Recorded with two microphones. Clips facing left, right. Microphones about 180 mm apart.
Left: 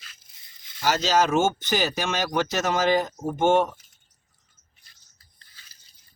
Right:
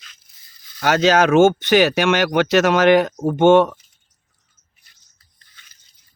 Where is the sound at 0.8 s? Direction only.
60° right (ahead or behind).